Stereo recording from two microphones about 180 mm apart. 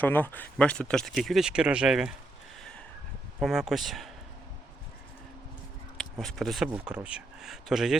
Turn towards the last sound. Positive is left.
turn(degrees=0)  # may be behind; listen again after turning